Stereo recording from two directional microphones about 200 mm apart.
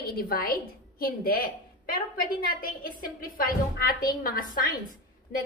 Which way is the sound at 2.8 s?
45° left (ahead or behind).